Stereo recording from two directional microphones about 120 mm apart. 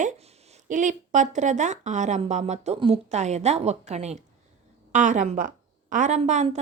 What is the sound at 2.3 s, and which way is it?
A woman's voice, 75° right (ahead or behind).